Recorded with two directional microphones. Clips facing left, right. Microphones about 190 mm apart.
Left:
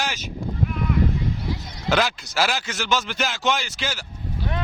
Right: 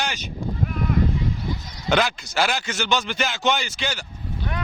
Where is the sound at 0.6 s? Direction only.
45° right (ahead or behind).